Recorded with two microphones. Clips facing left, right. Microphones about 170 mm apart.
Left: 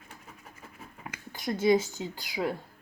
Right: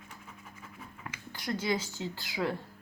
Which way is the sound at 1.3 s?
20° left (ahead or behind).